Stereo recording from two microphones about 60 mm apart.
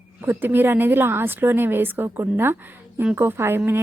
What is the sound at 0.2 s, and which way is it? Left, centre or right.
A woman's voice, right.